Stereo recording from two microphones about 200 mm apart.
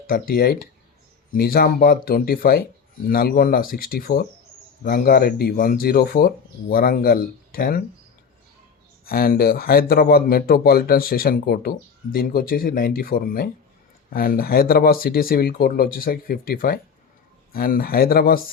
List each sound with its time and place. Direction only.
0.1 s speech: 50° left (ahead or behind)
9.0 s speech: 50° left (ahead or behind)